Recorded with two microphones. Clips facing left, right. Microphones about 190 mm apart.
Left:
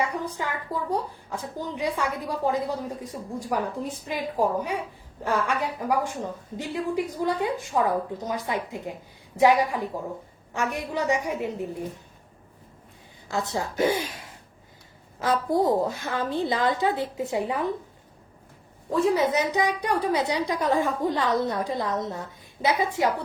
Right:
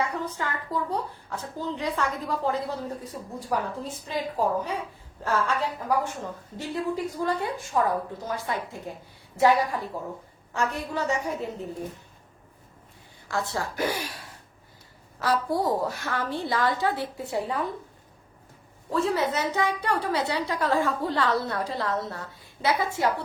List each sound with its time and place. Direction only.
0.3 s a woman's voice: 15° left (ahead or behind)
13.2 s a woman's voice: 20° left (ahead or behind)
15.2 s a woman's voice: 20° left (ahead or behind)
18.9 s a woman's voice: 15° left (ahead or behind)